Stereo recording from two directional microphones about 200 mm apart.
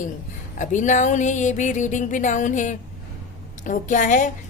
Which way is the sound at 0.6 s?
40° left (ahead or behind).